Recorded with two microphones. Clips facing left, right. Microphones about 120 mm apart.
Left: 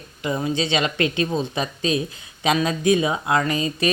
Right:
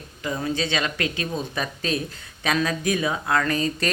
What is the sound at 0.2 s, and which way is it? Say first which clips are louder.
Speech: left 3 dB; 20° left (ahead or behind).